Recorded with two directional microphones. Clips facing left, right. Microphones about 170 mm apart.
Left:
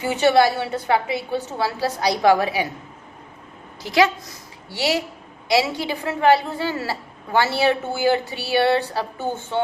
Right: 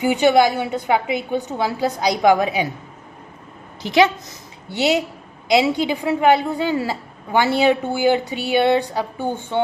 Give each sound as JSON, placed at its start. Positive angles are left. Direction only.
{"t": 0.0, "sound": "a woman's voice", "side_deg": -15}
{"t": 3.8, "sound": "a woman's voice", "side_deg": -20}